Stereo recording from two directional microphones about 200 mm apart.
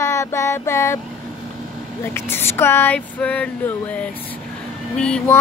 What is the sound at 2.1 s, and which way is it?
A woman's voice, 10° left (ahead or behind).